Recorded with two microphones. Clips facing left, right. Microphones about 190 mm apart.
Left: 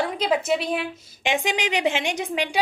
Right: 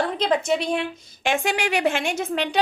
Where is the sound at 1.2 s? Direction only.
15° left (ahead or behind).